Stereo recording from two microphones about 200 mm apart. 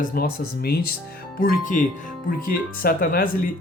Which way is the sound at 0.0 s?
45° left (ahead or behind).